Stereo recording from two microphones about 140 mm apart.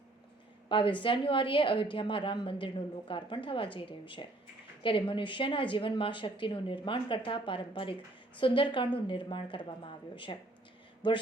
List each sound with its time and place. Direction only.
0.7 s a woman's voice: 35° left (ahead or behind)